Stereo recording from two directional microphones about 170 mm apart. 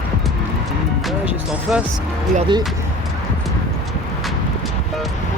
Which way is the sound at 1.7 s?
5° right (ahead or behind).